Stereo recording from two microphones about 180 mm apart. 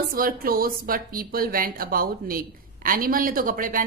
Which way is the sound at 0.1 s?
55° right (ahead or behind).